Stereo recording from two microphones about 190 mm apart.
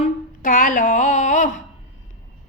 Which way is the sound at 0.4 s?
45° left (ahead or behind).